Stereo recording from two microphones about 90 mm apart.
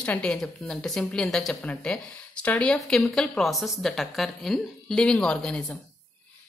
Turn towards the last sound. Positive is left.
turn(degrees=10)  # may be behind; listen again after turning